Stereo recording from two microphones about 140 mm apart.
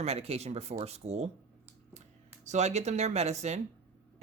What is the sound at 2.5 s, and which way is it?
Speech, 55° right (ahead or behind).